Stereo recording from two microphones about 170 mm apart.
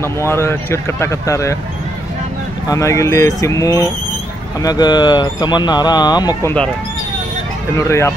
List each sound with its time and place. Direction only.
0.0 s speech: 15° left (ahead or behind)
2.7 s speech: 15° left (ahead or behind)
7.7 s speech: 15° left (ahead or behind)